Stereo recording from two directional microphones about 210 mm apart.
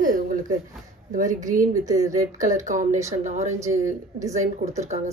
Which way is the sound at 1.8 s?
15° right (ahead or behind).